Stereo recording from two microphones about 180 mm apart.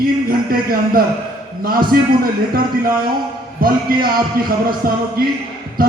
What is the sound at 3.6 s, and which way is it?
Speech, 55° right (ahead or behind).